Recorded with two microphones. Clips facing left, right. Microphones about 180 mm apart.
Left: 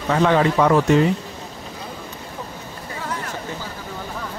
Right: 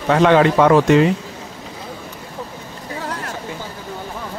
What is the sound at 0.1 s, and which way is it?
Speech, 70° right (ahead or behind).